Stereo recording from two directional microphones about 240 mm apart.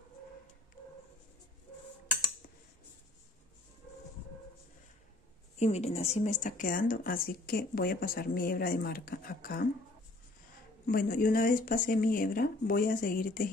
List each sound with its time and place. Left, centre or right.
5.6 s speech: left
10.9 s speech: left